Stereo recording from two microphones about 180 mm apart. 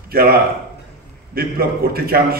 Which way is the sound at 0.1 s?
55° right (ahead or behind).